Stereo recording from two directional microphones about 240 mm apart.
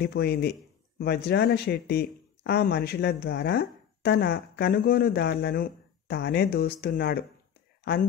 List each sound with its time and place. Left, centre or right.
0.0 s speech: left